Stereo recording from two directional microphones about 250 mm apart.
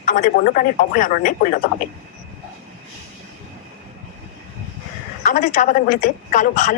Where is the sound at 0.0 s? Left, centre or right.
Left.